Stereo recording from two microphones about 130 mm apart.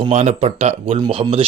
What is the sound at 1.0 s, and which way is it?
Speech, 40° right (ahead or behind).